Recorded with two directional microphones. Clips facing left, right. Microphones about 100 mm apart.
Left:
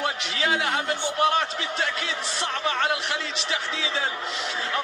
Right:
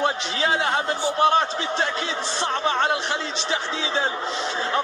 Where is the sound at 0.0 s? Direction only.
30° right (ahead or behind).